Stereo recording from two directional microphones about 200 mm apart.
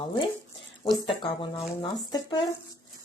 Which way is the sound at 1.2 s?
25° left (ahead or behind).